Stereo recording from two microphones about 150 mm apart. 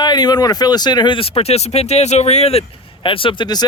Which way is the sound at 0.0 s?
30° left (ahead or behind).